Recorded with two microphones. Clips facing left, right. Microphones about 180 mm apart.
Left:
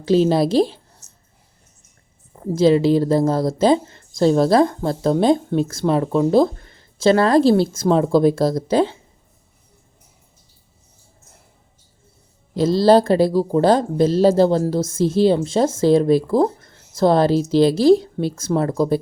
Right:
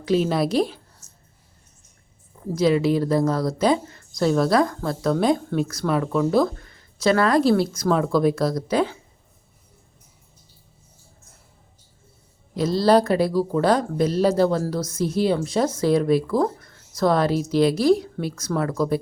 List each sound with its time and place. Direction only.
0.0 s a woman's voice: 30° left (ahead or behind)
2.5 s a woman's voice: 25° left (ahead or behind)
12.5 s a woman's voice: 25° left (ahead or behind)